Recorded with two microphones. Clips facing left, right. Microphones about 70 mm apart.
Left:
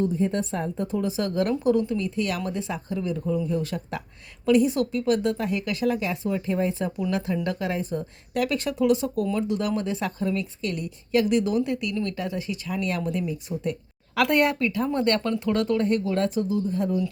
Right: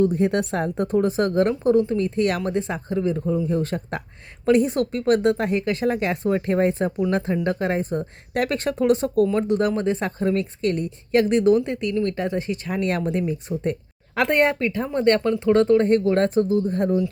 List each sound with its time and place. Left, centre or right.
0.0 s a woman's voice: right
2.0 s a woman's voice: right
14.2 s speech: right